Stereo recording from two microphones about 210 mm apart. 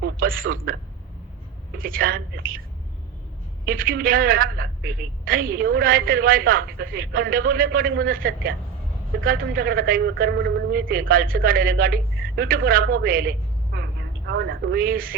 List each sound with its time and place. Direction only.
0.0 s a man's voice: 45° right (ahead or behind)
1.8 s a woman's voice: 45° right (ahead or behind)
3.7 s a woman's voice: 45° right (ahead or behind)
13.7 s vehicle: 50° right (ahead or behind)
14.3 s a woman's voice: 55° right (ahead or behind)